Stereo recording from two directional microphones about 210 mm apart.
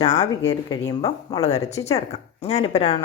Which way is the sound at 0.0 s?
20° left (ahead or behind).